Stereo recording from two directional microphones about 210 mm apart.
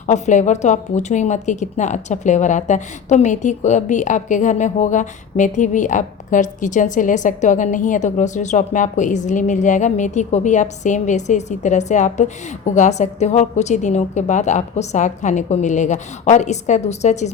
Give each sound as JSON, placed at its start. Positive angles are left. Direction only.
{"t": 0.1, "sound": "a woman's voice", "side_deg": 35}